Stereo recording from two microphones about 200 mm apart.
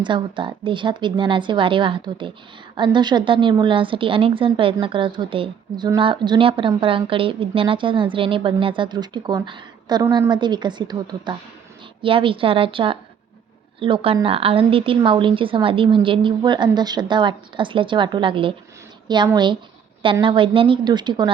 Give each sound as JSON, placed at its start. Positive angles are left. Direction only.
{"t": 0.0, "sound": "a woman's voice", "side_deg": -25}